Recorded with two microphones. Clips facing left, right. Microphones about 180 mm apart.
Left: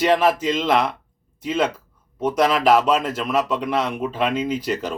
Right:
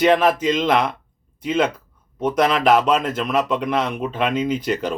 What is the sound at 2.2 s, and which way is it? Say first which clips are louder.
A man's voice: even; 10° left (ahead or behind).